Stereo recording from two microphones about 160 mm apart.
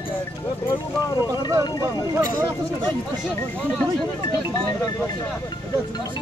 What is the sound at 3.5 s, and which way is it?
Speech, 5° left (ahead or behind).